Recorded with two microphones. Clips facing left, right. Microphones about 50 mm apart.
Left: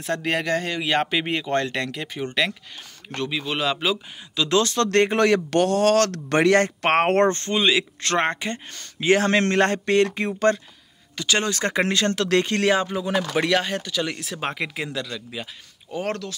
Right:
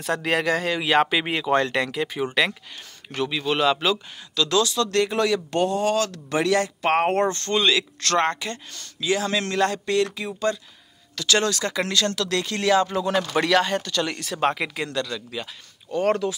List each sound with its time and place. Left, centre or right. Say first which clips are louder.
0.1 s speech: right 1 dB; centre
3.1 s speech: right 2 dB; centre
4.4 s speech: left 1 dB; left
4.6 s speech: left 3 dB; left
5.5 s speech: left 3 dB; left
7.4 s speech: even; centre
9.0 s speech: left 5 dB; left
11.1 s speech: right 1 dB; left
11.5 s speech: left 2 dB; left
12.8 s speech: right 1 dB; centre